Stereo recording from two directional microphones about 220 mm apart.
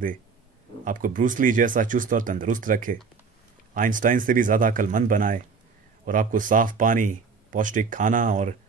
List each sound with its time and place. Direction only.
0.8 s speech: 35° right (ahead or behind)